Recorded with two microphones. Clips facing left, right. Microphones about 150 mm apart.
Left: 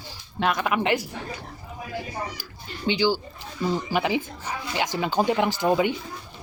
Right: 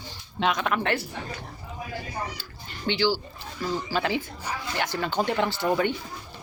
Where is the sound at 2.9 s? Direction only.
15° left (ahead or behind).